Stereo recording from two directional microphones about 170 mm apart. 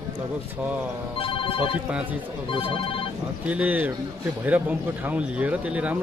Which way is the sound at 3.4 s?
10° right (ahead or behind).